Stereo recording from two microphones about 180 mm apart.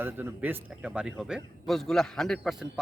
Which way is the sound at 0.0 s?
10° right (ahead or behind).